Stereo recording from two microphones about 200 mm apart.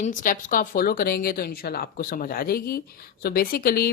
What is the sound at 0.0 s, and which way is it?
Speech, 40° left (ahead or behind).